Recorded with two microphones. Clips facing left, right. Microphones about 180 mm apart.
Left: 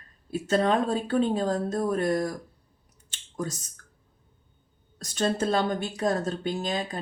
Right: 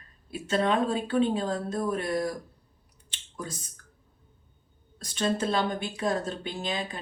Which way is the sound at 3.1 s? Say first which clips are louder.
Left 6 dB; 45° left (ahead or behind).